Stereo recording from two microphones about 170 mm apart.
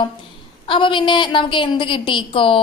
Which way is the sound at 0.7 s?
30° left (ahead or behind).